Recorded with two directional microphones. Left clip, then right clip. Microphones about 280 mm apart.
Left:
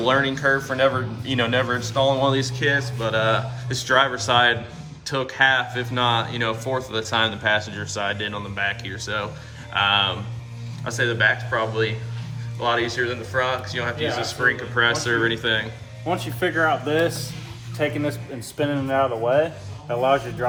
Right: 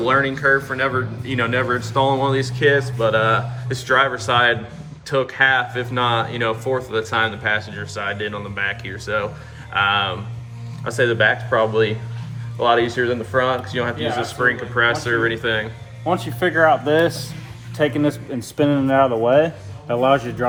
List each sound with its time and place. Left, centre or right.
0.0 s speech: centre
16.0 s speech: centre